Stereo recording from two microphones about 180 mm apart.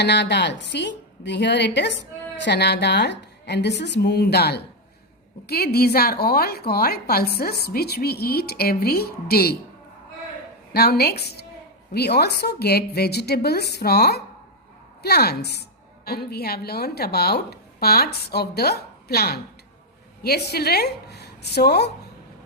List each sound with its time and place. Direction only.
0.0 s a woman's voice: 70° left (ahead or behind)
10.7 s a woman's voice: 60° left (ahead or behind)